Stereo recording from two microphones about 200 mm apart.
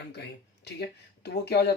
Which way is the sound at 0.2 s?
55° left (ahead or behind).